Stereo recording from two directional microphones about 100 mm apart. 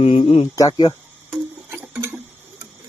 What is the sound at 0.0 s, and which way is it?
Speech, 65° left (ahead or behind).